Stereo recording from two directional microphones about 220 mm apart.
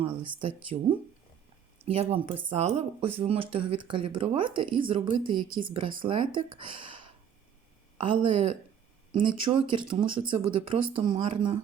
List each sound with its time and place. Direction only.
0.3 s speech: 25° right (ahead or behind)
7.9 s speech: 25° right (ahead or behind)